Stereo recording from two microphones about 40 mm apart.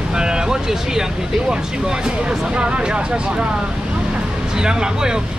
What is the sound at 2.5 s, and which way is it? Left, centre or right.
Speech, right.